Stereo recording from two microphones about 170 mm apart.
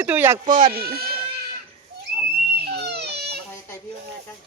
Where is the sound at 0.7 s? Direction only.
65° right (ahead or behind).